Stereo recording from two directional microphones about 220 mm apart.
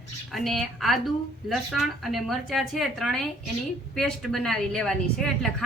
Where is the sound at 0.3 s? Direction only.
Centre (ahead or behind).